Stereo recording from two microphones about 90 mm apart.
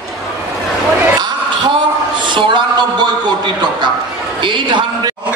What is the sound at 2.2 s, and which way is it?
Speech, 60° right (ahead or behind).